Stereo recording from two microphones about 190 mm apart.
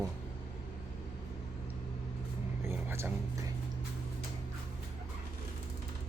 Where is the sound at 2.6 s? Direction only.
15° right (ahead or behind).